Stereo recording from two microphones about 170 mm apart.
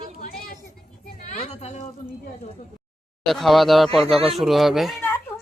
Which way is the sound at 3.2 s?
Centre (ahead or behind).